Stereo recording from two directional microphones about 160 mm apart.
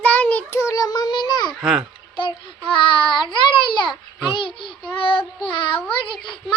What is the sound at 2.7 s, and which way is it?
Child singing, 30° left (ahead or behind).